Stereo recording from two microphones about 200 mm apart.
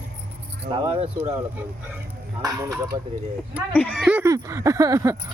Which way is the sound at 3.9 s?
5° right (ahead or behind).